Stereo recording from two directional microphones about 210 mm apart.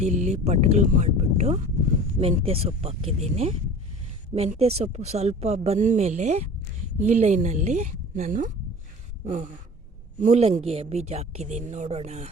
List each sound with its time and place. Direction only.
0.0 s speech: 35° right (ahead or behind)